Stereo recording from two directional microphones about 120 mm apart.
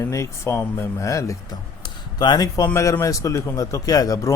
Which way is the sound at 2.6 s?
20° left (ahead or behind).